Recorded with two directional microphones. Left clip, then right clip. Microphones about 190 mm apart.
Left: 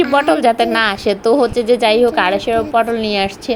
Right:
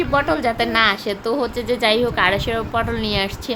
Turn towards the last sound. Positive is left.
turn(degrees=15)  # may be behind; listen again after turning